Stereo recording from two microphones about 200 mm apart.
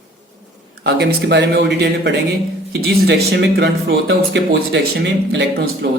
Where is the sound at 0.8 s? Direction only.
55° right (ahead or behind).